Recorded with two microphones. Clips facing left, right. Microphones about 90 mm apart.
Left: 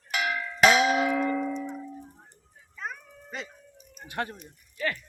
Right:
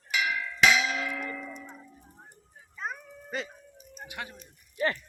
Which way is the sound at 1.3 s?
55° left (ahead or behind).